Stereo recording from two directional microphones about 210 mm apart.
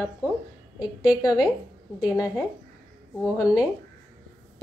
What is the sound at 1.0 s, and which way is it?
Speech, 15° left (ahead or behind).